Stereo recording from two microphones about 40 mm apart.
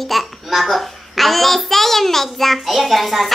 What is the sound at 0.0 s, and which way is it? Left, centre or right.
A child's voice, centre.